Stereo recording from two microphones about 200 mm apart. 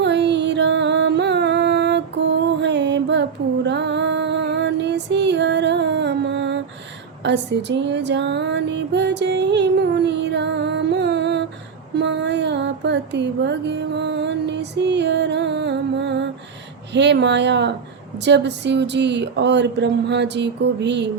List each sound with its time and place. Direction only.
0.0 s music: 60° right (ahead or behind)
7.3 s female singing: 60° right (ahead or behind)
11.9 s music: 60° right (ahead or behind)
16.9 s speech: 60° right (ahead or behind)